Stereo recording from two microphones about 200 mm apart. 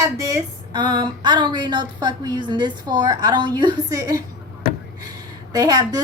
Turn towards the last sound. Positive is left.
turn(degrees=-20)  # may be behind; listen again after turning